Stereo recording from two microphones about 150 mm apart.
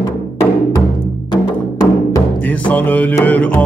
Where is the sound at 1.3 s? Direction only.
25° left (ahead or behind).